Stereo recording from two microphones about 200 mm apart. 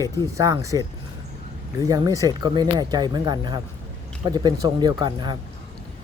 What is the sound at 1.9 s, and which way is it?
Speech, 15° right (ahead or behind).